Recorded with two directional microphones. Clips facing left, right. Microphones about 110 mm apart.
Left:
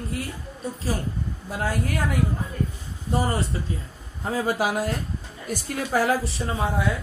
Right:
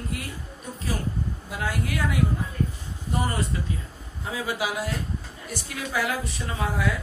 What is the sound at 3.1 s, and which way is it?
Speech, 30° left (ahead or behind).